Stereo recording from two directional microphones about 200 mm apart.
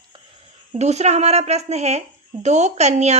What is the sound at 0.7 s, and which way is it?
A woman's voice, 35° right (ahead or behind).